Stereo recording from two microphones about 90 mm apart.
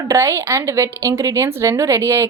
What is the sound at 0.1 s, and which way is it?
A woman's voice, 35° right (ahead or behind).